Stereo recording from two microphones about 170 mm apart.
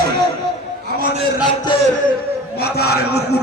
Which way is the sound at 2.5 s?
70° left (ahead or behind).